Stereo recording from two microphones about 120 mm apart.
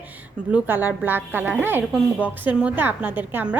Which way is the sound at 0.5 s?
15° right (ahead or behind).